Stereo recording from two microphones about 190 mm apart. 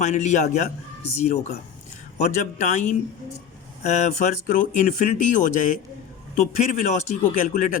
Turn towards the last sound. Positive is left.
turn(degrees=40)  # may be behind; listen again after turning